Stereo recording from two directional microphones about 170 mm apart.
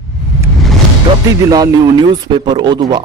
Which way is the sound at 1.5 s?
20° right (ahead or behind).